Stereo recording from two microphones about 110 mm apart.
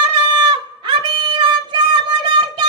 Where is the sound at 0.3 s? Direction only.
40° right (ahead or behind).